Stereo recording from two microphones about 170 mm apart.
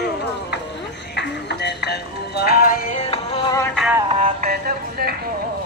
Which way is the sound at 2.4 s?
65° left (ahead or behind).